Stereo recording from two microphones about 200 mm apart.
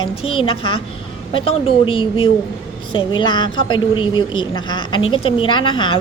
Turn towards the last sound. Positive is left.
turn(degrees=25)  # may be behind; listen again after turning